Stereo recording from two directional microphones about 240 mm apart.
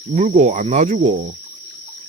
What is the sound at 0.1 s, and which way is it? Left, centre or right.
Speech, right.